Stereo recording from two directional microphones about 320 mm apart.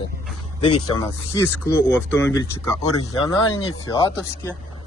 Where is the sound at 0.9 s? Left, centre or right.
Centre.